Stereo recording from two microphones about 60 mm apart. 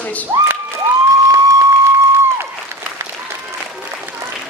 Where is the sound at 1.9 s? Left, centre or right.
Right.